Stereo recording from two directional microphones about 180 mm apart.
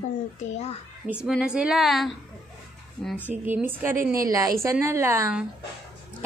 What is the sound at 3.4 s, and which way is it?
A woman's voice, 10° right (ahead or behind).